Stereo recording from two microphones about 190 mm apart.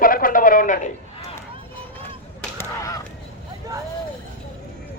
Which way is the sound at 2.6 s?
20° left (ahead or behind).